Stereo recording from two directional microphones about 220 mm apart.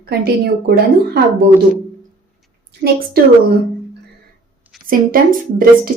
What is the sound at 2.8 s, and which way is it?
Speech, 35° right (ahead or behind).